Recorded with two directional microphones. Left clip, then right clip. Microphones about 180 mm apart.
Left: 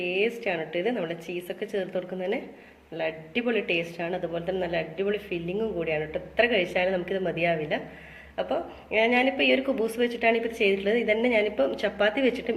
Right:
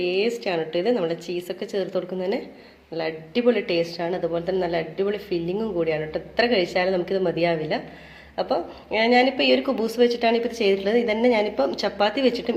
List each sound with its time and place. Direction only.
0.0 s speech: 40° right (ahead or behind)